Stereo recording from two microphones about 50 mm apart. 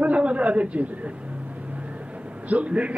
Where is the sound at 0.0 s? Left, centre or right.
Right.